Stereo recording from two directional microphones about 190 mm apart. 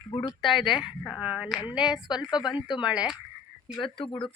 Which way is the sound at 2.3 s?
20° left (ahead or behind).